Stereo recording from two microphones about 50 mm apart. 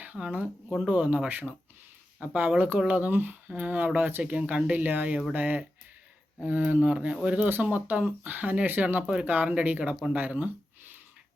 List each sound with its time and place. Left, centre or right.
0.0 s speech: right
4.2 s speech: right
4.7 s speech: right
7.3 s speech: right
7.6 s speech: right